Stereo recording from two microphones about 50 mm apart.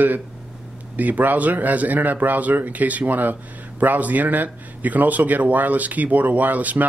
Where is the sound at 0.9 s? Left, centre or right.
Right.